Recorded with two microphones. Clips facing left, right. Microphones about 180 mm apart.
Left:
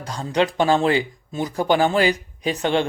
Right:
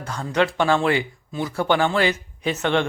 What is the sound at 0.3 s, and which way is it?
Speech, 15° left (ahead or behind).